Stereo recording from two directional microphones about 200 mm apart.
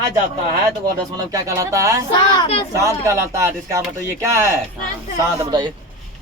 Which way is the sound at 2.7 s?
15° right (ahead or behind).